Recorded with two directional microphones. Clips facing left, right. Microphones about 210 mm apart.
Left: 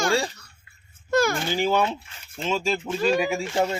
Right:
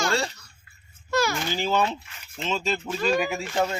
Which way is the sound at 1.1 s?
50° left (ahead or behind).